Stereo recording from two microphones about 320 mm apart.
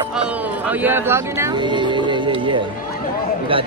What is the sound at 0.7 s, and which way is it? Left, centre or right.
A man's voice, centre.